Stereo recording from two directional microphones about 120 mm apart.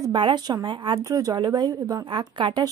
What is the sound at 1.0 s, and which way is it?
Speech, 30° right (ahead or behind).